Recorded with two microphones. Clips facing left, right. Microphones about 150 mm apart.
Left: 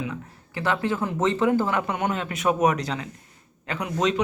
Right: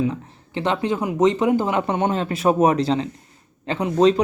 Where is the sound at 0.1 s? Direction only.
25° right (ahead or behind).